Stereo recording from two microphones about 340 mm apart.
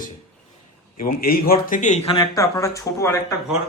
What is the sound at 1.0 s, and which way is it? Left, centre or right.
A man's voice, left.